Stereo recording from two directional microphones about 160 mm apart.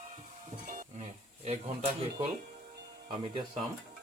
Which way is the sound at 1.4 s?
40° right (ahead or behind).